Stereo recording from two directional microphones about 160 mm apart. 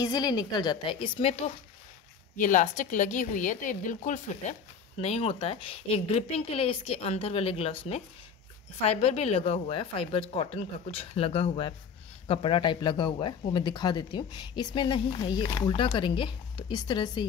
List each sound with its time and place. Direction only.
0.0 s speech: 25° left (ahead or behind)
2.3 s a woman's voice: 55° left (ahead or behind); by 17.3 s 30° left (ahead or behind)